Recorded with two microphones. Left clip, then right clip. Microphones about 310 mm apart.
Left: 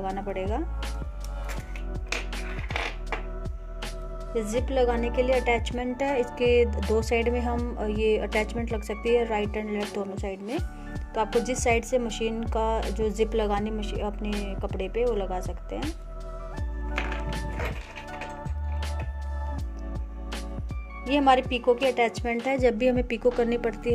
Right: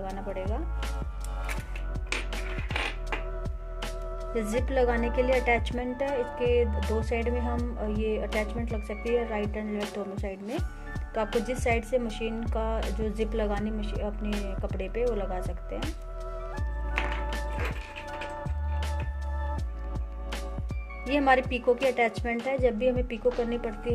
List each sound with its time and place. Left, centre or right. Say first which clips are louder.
0.0 s speech: left 4 dB; centre
2.3 s music: left 1 dB; centre
3.8 s speech: right 1 dB; centre
5.9 s speech: left 3 dB; centre
11.1 s speech: left 3 dB; centre
11.4 s speech: left 3 dB; centre
21.1 s speech: left 2 dB; centre